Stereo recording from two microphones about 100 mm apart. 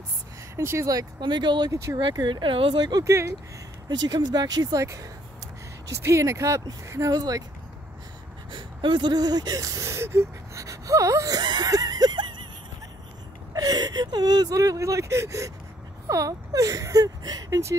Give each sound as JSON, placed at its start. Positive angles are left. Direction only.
{"t": 0.6, "sound": "speech", "side_deg": -30}
{"t": 1.2, "sound": "speech", "side_deg": -50}
{"t": 3.1, "sound": "speech", "side_deg": -30}
{"t": 4.1, "sound": "speech", "side_deg": -40}
{"t": 5.9, "sound": "speech", "side_deg": -30}
{"t": 8.5, "sound": "a sound", "side_deg": -50}
{"t": 13.5, "sound": "speech", "side_deg": -40}